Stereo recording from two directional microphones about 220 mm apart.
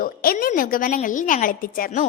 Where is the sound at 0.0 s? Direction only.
40° left (ahead or behind).